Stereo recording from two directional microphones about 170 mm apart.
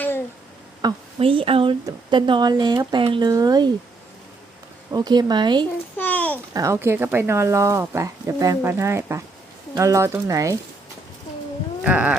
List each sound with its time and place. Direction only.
0.8 s speech: 30° right (ahead or behind)
4.9 s speech: 25° right (ahead or behind)
6.0 s a sound: 10° left (ahead or behind)
6.5 s speech: 20° right (ahead or behind)
11.8 s speech: 10° right (ahead or behind)